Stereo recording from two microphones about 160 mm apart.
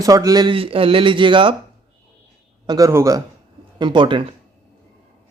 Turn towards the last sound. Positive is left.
turn(degrees=-30)  # may be behind; listen again after turning